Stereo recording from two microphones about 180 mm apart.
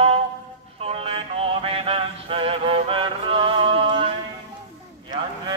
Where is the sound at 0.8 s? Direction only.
30° right (ahead or behind).